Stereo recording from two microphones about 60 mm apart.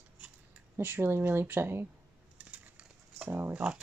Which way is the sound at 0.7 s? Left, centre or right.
Right.